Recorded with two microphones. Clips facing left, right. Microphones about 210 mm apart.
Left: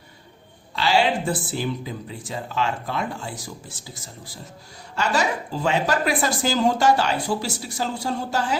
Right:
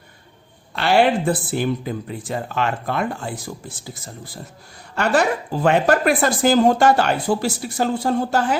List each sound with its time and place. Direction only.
0.8 s speech: 60° right (ahead or behind)